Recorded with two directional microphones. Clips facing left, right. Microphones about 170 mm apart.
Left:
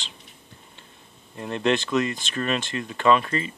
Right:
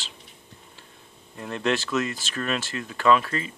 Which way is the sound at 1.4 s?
Centre (ahead or behind).